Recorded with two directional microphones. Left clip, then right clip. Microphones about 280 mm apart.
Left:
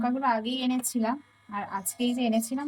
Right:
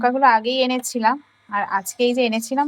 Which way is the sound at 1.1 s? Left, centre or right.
Right.